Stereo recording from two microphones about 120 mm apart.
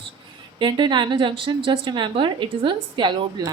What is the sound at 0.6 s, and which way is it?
A woman's voice, 40° right (ahead or behind).